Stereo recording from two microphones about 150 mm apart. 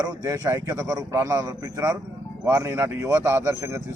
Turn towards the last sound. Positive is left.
turn(degrees=-20)  # may be behind; listen again after turning